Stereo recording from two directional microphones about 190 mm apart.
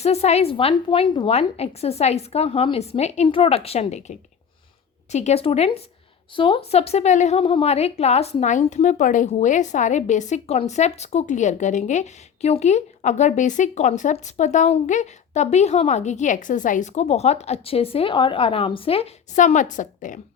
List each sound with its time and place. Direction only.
0.0 s a woman's voice: 35° left (ahead or behind)
5.1 s a woman's voice: 35° left (ahead or behind)